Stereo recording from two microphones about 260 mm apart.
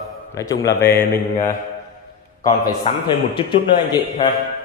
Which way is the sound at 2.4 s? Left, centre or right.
Centre.